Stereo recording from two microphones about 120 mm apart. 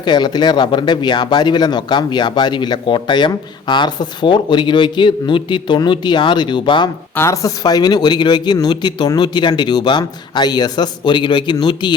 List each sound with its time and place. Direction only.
0.0 s a man's voice: 40° left (ahead or behind)
7.2 s a man's voice: 30° left (ahead or behind)